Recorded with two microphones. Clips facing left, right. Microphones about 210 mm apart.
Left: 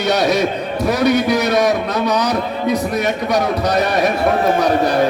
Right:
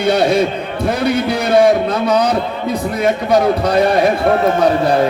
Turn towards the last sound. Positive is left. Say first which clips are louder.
# right 2 dB
turn(degrees=-30)  # may be behind; listen again after turning